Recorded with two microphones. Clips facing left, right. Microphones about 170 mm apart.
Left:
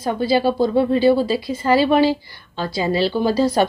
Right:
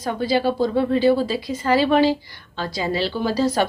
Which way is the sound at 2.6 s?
30° left (ahead or behind).